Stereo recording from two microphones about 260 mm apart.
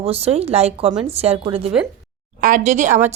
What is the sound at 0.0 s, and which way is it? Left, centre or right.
Speech, right.